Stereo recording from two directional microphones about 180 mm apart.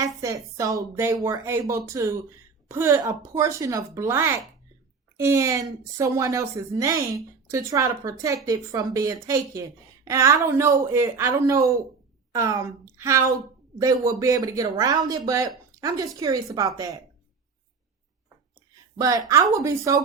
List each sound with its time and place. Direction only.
0.0 s a woman's voice: 20° right (ahead or behind)
18.9 s a woman's voice: 20° right (ahead or behind)